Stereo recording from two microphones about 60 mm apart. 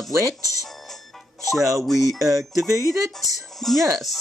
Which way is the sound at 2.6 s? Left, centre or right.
Right.